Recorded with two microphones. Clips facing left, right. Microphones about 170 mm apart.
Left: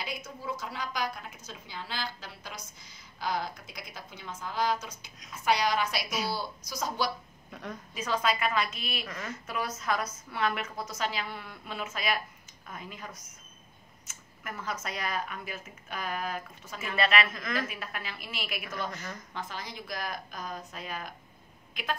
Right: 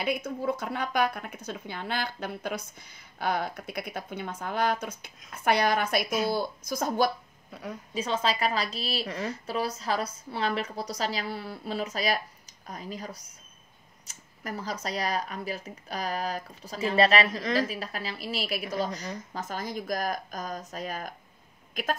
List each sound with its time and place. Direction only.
0.0 s speech: 60° right (ahead or behind)
7.5 s a woman's voice: 10° right (ahead or behind)
7.9 s speech: 30° right (ahead or behind)